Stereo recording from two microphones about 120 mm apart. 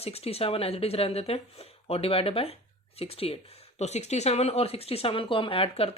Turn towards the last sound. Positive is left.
turn(degrees=50)  # may be behind; listen again after turning